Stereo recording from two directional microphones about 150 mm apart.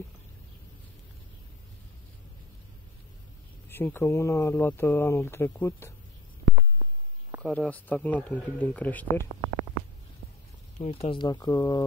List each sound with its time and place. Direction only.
3.6 s speech: 15° left (ahead or behind)
6.5 s a sound: 15° right (ahead or behind)
7.4 s speech: 5° left (ahead or behind)
10.8 s speech: 40° left (ahead or behind); by 11.8 s 25° left (ahead or behind)